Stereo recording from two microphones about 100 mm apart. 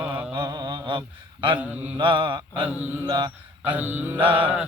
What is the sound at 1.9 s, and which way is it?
Mantra, 50° right (ahead or behind).